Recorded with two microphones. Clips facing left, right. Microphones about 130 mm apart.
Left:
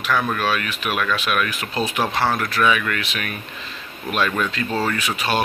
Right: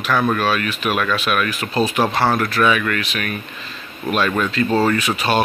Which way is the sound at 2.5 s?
10° left (ahead or behind).